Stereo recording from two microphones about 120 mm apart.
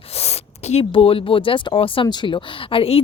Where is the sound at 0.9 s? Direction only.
50° left (ahead or behind).